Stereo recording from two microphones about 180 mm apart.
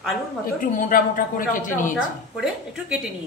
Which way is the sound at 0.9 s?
50° left (ahead or behind).